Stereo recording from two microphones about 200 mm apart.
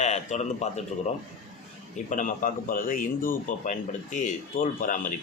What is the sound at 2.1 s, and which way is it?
A man's voice, 40° left (ahead or behind).